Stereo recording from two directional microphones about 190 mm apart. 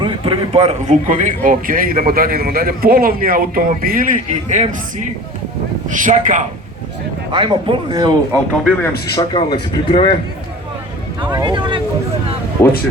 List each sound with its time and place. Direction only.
0.0 s a man's voice: 30° right (ahead or behind)
5.9 s speech: 45° right (ahead or behind)
7.3 s speech: 25° right (ahead or behind)
9.1 s speech: 25° left (ahead or behind)
11.2 s speech: 25° right (ahead or behind)